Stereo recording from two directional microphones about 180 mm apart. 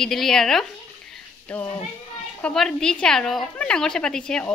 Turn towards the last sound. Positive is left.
turn(degrees=5)  # may be behind; listen again after turning